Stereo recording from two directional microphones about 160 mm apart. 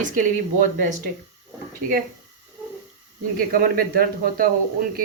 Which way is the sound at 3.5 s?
65° right (ahead or behind).